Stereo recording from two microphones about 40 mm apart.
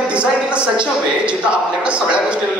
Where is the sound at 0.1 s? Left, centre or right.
Right.